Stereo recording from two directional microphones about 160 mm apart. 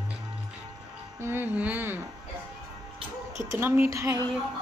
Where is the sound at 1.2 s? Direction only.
15° right (ahead or behind).